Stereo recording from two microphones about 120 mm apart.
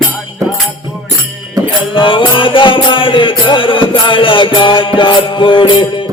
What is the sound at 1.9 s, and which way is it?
Music, 45° left (ahead or behind).